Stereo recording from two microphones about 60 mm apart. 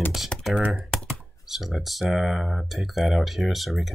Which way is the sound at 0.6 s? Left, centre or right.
Right.